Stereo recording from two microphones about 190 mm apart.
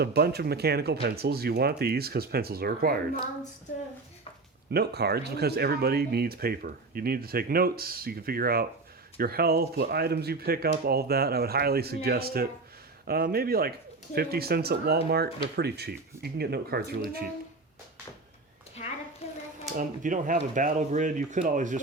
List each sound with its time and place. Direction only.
0.0 s speech: 55° right (ahead or behind)
4.7 s speech: 60° right (ahead or behind)
19.2 s a sound: 30° left (ahead or behind)
19.7 s speech: 45° right (ahead or behind)